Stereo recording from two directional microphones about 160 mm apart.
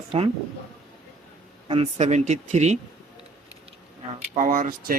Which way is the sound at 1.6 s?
35° right (ahead or behind).